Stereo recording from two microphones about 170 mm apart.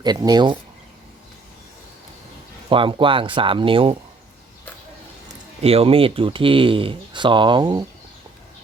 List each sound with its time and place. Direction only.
0.0 s speech: 25° right (ahead or behind)
2.6 s speech: 30° right (ahead or behind)
5.6 s speech: 35° right (ahead or behind)